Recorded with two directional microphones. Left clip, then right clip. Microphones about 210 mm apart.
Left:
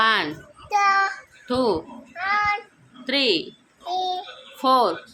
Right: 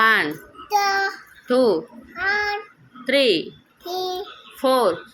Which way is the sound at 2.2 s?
5° left (ahead or behind).